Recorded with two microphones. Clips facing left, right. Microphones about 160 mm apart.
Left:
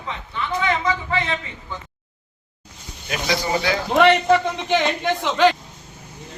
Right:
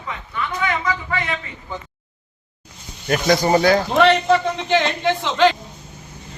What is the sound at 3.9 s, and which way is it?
A man's voice, 15° left (ahead or behind).